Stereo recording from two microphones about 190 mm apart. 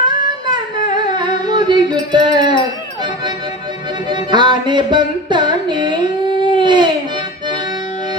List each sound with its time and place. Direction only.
0.0 s humming: 25° right (ahead or behind)
4.1 s music: 25° right (ahead or behind)
6.6 s baby cry: 25° right (ahead or behind)